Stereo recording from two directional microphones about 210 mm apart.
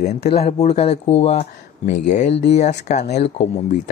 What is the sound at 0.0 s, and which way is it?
Speech, 30° left (ahead or behind).